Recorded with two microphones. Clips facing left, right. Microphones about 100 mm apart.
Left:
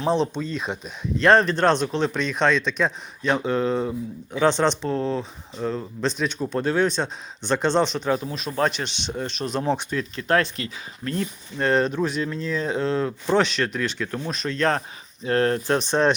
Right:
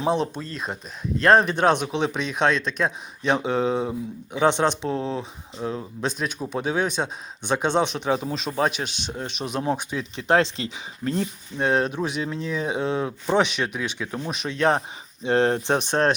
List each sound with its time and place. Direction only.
0.0 s speech: 10° right (ahead or behind)
3.2 s speech: 20° right (ahead or behind)
8.5 s speech: 10° right (ahead or behind)
11.5 s speech: 10° right (ahead or behind)